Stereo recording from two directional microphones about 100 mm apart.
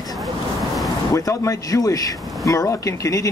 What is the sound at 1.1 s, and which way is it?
Speech, 35° left (ahead or behind).